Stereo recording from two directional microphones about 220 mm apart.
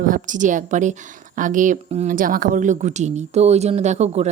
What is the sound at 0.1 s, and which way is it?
Speech, 35° right (ahead or behind).